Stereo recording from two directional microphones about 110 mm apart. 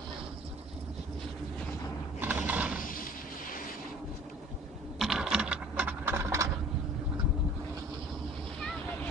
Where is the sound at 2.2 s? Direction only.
15° right (ahead or behind).